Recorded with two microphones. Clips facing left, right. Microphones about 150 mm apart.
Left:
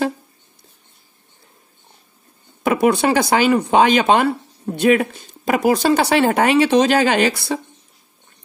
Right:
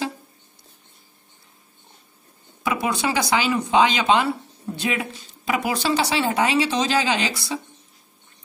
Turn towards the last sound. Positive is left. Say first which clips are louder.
# left 7 dB
turn(degrees=55)  # may be behind; listen again after turning